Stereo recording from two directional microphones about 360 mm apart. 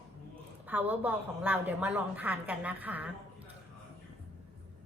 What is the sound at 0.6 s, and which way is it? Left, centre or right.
A woman's voice, centre.